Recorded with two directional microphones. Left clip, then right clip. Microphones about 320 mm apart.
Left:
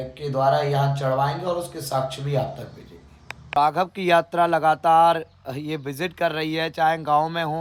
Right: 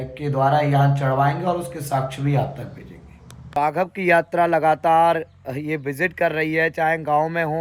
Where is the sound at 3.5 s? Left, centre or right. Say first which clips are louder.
Left 1 dB; centre.